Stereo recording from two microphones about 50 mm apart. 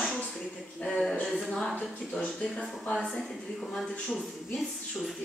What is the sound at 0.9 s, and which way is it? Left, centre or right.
Speech, centre.